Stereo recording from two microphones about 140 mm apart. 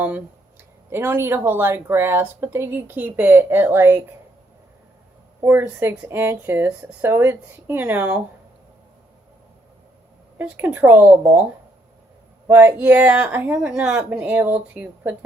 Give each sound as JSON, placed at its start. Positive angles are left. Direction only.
{"t": 0.9, "sound": "a woman's voice", "side_deg": -15}
{"t": 5.4, "sound": "a woman's voice", "side_deg": -15}
{"t": 10.3, "sound": "a woman's voice", "side_deg": -10}
{"t": 12.5, "sound": "a woman's voice", "side_deg": -15}